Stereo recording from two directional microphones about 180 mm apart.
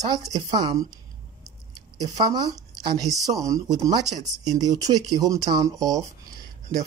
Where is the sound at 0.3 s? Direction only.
25° right (ahead or behind).